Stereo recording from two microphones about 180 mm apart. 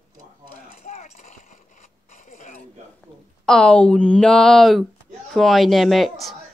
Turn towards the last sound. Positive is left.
turn(degrees=0)  # may be behind; listen again after turning